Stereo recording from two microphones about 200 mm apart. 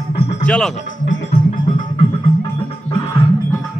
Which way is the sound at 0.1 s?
35° left (ahead or behind).